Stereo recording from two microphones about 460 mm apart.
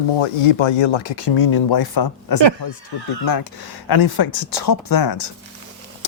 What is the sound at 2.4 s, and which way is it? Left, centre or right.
Speech, right.